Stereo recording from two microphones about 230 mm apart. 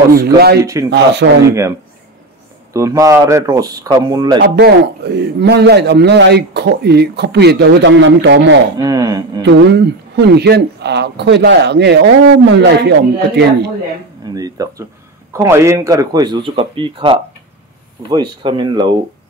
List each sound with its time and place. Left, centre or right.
0.1 s a man's voice: right
2.7 s speech: centre
4.4 s a man's voice: right
8.7 s speech: centre
9.4 s a man's voice: right
14.2 s speech: centre